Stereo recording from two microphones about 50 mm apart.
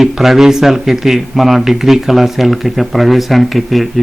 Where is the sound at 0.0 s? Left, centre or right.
Centre.